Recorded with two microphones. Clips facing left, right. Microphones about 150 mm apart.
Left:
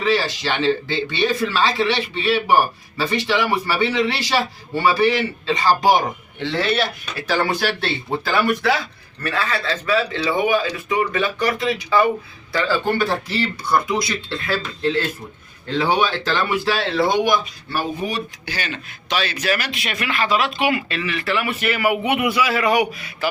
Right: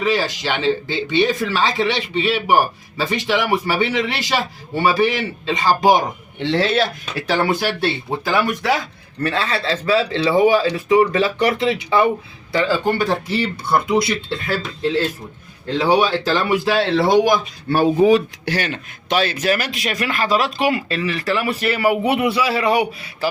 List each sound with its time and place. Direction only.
0.0 s a man's voice: 15° right (ahead or behind)
9.2 s a man's voice: 30° right (ahead or behind)
14.4 s speech: 10° right (ahead or behind)
17.2 s a man's voice: 40° right (ahead or behind)
18.4 s a man's voice: 65° right (ahead or behind); by 23.3 s 30° right (ahead or behind)